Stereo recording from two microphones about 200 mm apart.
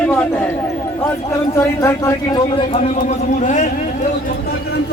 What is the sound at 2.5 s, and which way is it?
A man's voice, 35° left (ahead or behind).